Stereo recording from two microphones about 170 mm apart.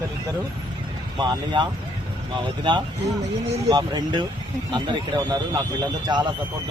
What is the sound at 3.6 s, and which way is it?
Speech, 25° right (ahead or behind).